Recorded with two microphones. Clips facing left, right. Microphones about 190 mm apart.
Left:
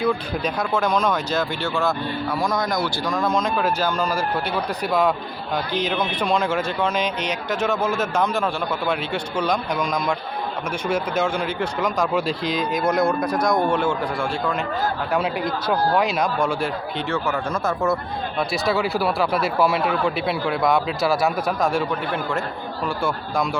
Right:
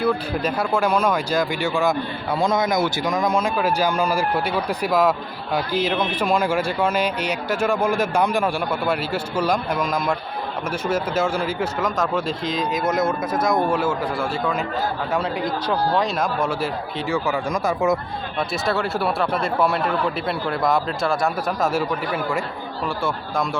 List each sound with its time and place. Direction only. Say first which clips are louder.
0.0 s speech: right 1 dB; 5° right (ahead or behind)
15.2 s speech: even; 10° left (ahead or behind)
16.2 s speech: left 1 dB; 5° right (ahead or behind)
18.3 s speech: left 1 dB; centre (ahead or behind)